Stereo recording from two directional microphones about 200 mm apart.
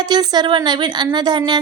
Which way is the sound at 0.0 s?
20° right (ahead or behind).